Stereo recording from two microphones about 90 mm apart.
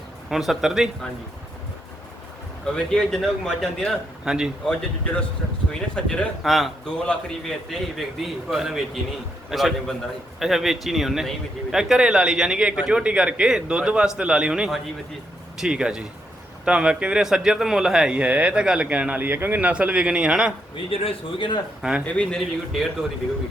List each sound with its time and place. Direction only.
0.3 s a man's voice: 5° right (ahead or behind)
2.7 s a man's voice: 5° left (ahead or behind)
6.4 s a man's voice: centre (ahead or behind)
20.9 s a man's voice: 90° left; by 21.6 s 65° left (ahead or behind)
21.8 s speech: 5° right (ahead or behind)
22.0 s speech: 15° left (ahead or behind)
22.4 s a man's voice: centre (ahead or behind)